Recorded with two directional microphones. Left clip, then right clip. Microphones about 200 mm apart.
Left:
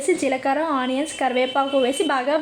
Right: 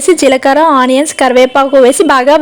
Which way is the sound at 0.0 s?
55° right (ahead or behind).